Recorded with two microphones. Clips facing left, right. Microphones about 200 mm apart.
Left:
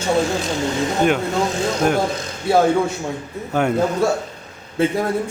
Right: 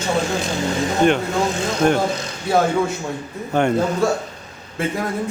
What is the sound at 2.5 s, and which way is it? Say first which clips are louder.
Speech: left 2 dB; 25° left (ahead or behind).